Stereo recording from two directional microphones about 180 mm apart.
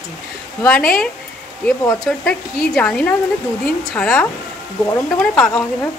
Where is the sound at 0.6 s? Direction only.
5° left (ahead or behind).